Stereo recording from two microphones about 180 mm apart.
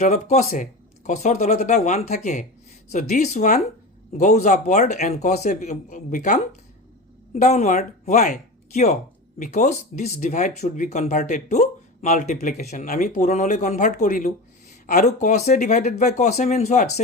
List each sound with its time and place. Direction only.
0.0 s speech: 40° left (ahead or behind)
13.1 s speech: 40° left (ahead or behind)